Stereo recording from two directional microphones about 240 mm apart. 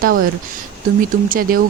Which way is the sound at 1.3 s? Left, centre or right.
Right.